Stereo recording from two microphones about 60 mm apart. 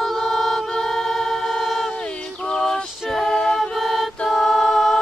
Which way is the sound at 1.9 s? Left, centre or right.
Centre.